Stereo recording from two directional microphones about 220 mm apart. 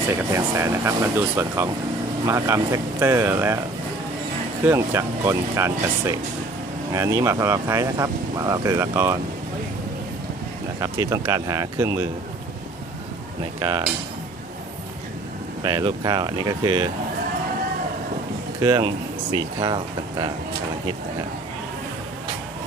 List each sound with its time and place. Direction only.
0.1 s speech: 15° right (ahead or behind)
4.6 s speech: 10° right (ahead or behind)
10.8 s speech: 15° right (ahead or behind)
13.6 s speech: 15° right (ahead or behind)
15.6 s speech: 20° right (ahead or behind)
18.6 s speech: 20° right (ahead or behind)